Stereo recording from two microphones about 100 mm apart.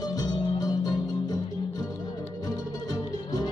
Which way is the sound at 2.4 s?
40° left (ahead or behind).